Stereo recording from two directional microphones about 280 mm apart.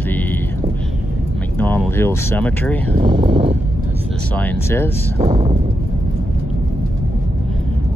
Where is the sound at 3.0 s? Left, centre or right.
Centre.